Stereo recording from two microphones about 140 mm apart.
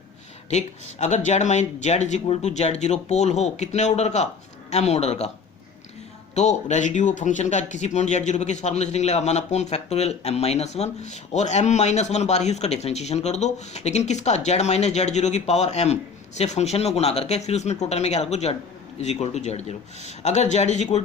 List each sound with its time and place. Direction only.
0.5 s speech: 55° left (ahead or behind)
6.3 s speech: 55° left (ahead or behind)